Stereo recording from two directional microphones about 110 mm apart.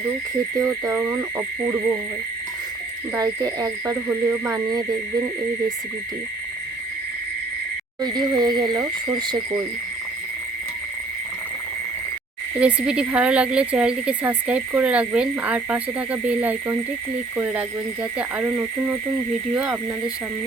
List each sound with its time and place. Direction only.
0.5 s speech: 30° right (ahead or behind)
3.2 s speech: 35° right (ahead or behind)
4.6 s speech: 35° right (ahead or behind)
8.0 s speech: 40° right (ahead or behind)
12.5 s speech: 10° right (ahead or behind)